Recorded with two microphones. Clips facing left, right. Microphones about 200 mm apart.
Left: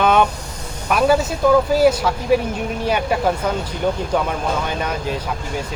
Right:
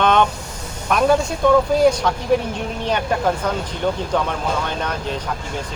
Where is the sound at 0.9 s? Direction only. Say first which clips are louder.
Even; 5° left (ahead or behind).